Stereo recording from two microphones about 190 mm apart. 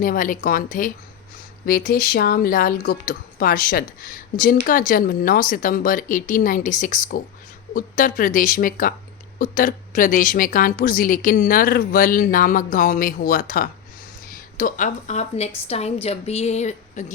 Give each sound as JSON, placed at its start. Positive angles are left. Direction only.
{"t": 0.0, "sound": "a woman's voice", "side_deg": 45}